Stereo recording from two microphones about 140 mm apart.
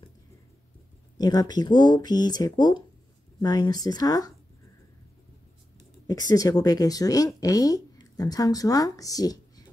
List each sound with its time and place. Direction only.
1.1 s speech: 30° left (ahead or behind)
6.0 s speech: 25° left (ahead or behind)